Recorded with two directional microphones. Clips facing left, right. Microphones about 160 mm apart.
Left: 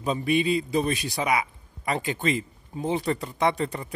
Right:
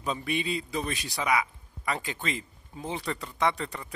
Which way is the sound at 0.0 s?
25° left (ahead or behind).